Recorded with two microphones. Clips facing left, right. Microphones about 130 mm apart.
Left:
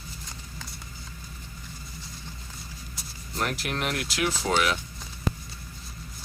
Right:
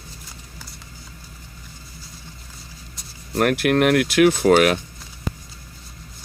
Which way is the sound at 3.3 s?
60° right (ahead or behind).